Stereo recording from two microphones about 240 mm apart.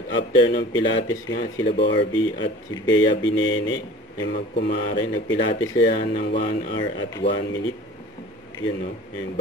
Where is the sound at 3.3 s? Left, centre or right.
Left.